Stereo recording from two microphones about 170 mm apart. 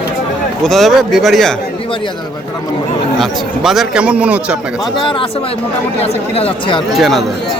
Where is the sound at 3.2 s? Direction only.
Centre (ahead or behind).